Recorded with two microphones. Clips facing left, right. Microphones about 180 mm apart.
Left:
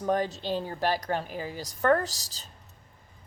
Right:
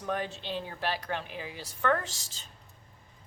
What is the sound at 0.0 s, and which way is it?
Speech, 40° left (ahead or behind).